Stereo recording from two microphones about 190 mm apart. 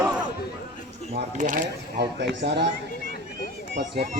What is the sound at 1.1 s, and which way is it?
Speech, 45° right (ahead or behind).